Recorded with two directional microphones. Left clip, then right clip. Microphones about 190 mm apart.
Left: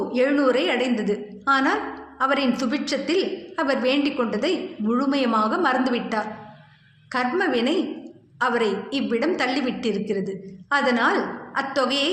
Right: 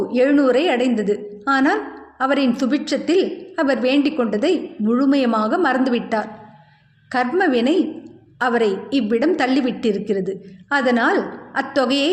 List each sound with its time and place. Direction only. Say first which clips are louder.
0.1 s a woman's voice: right 4 dB; 45° right (ahead or behind)